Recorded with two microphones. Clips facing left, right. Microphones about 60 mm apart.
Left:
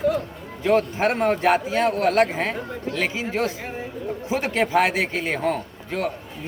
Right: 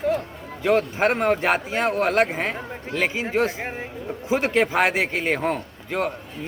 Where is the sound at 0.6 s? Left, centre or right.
Right.